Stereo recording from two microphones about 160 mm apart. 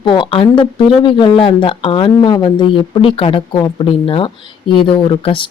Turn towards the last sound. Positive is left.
turn(degrees=35)  # may be behind; listen again after turning